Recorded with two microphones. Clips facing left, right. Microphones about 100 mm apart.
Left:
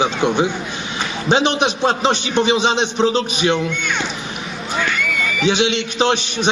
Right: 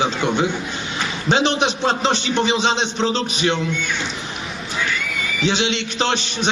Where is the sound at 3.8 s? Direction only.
65° left (ahead or behind).